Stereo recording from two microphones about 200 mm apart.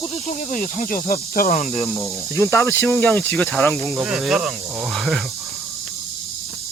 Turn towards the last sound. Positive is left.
turn(degrees=0)  # may be behind; listen again after turning